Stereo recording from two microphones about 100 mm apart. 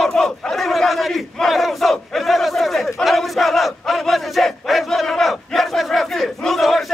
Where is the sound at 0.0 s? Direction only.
5° left (ahead or behind).